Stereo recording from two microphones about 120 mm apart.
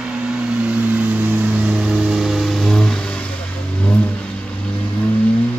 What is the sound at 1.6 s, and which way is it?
Music, 5° right (ahead or behind).